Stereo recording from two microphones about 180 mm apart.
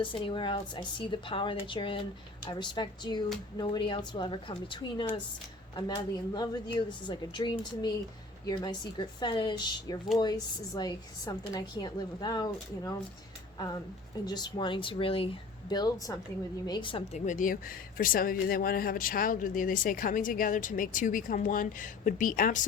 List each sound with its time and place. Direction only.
0.0 s a woman's voice: 30° left (ahead or behind)
14.3 s a woman's voice: 25° left (ahead or behind)
17.2 s speech: 45° left (ahead or behind)